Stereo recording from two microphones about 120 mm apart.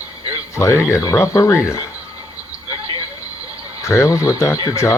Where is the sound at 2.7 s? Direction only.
45° right (ahead or behind).